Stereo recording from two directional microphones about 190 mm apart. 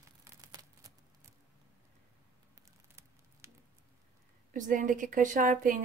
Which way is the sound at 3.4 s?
15° right (ahead or behind).